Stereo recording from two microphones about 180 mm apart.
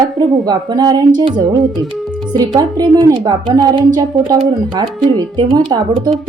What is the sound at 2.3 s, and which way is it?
A woman's voice, 20° right (ahead or behind).